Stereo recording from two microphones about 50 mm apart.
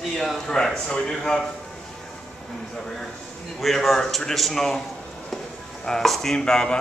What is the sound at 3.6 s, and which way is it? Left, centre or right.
A man's voice, centre.